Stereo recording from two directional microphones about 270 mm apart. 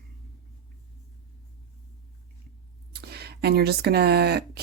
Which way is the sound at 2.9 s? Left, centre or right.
Right.